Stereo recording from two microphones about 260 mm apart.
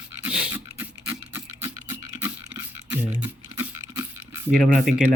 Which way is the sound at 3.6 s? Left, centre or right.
Centre.